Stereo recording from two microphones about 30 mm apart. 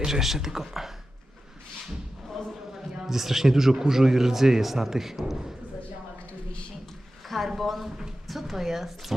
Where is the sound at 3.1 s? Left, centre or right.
Centre.